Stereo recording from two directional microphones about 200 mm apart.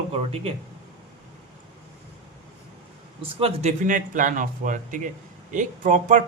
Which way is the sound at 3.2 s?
30° right (ahead or behind).